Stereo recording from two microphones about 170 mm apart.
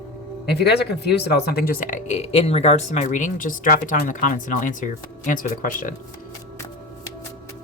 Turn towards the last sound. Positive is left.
turn(degrees=55)  # may be behind; listen again after turning